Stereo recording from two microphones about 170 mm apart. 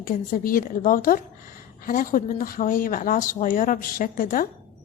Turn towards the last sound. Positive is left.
turn(degrees=55)  # may be behind; listen again after turning